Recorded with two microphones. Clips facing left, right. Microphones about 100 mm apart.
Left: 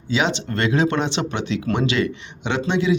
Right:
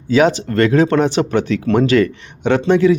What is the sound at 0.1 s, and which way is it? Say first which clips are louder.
Speech: right 8 dB; 45° right (ahead or behind).